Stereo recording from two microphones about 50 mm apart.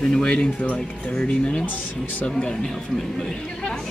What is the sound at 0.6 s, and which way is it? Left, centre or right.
Speech, left.